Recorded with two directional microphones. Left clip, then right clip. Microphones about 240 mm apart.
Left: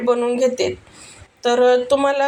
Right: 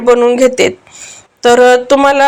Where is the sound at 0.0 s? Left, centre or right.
Right.